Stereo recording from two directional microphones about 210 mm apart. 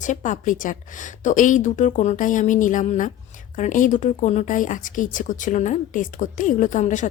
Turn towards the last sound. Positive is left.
turn(degrees=35)  # may be behind; listen again after turning